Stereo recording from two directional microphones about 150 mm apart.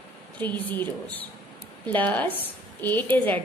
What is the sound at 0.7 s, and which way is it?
A woman's voice, 10° left (ahead or behind).